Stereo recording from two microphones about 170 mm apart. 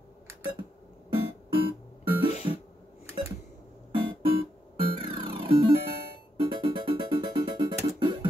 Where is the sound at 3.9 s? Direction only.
30° right (ahead or behind).